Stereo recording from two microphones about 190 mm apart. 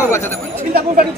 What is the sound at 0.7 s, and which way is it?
Speech, 50° right (ahead or behind).